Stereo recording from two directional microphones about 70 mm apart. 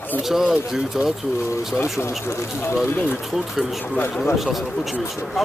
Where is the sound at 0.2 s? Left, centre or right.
Centre.